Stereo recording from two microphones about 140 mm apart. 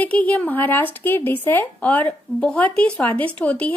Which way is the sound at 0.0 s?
10° left (ahead or behind).